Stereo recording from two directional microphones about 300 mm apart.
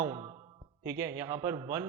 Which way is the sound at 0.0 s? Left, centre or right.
Centre.